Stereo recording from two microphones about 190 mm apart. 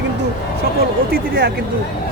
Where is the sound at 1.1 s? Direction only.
50° right (ahead or behind).